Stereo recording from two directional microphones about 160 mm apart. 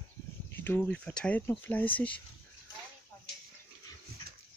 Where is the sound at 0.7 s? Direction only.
10° left (ahead or behind).